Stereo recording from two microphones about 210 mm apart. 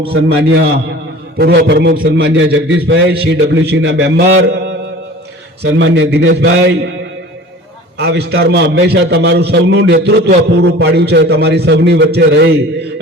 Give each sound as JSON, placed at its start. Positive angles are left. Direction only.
{"t": 0.3, "sound": "a man's voice", "side_deg": -55}
{"t": 5.8, "sound": "a man's voice", "side_deg": -60}
{"t": 7.9, "sound": "a man's voice", "side_deg": -50}